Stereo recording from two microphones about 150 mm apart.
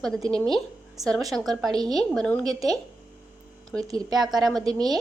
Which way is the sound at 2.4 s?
25° right (ahead or behind).